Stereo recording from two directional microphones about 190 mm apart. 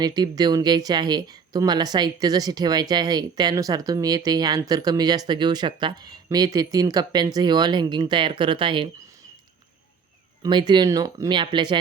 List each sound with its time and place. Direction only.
0.0 s speech: 20° right (ahead or behind)
10.4 s speech: 20° right (ahead or behind)